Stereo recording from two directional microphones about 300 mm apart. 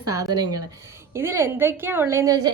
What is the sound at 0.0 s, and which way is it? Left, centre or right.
Speech, centre.